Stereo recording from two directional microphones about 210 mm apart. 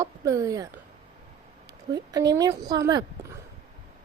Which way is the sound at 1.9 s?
20° right (ahead or behind).